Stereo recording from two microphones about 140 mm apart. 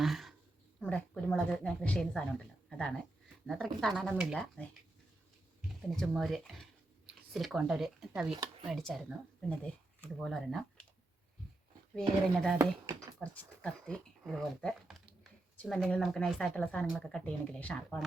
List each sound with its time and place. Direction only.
0.0 s a sound: centre (ahead or behind)
0.8 s a woman's voice: 10° left (ahead or behind)
6.0 s speech: centre (ahead or behind)
11.9 s speech: 5° left (ahead or behind)
12.5 s speech: 25° right (ahead or behind)
13.1 s speech: 10° left (ahead or behind)